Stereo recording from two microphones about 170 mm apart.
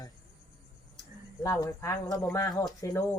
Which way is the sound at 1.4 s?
20° left (ahead or behind).